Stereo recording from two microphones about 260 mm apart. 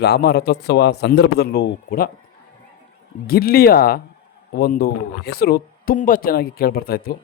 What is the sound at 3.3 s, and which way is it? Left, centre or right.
Speech, left.